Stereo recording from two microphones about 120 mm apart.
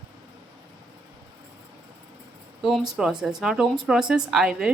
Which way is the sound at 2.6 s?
Centre (ahead or behind).